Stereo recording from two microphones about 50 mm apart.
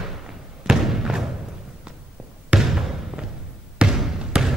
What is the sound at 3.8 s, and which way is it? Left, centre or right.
Basketball bounce, centre.